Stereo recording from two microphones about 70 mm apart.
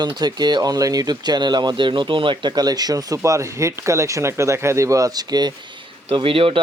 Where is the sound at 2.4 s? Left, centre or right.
Right.